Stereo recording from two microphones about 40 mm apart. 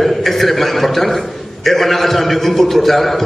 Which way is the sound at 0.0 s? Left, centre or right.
Centre.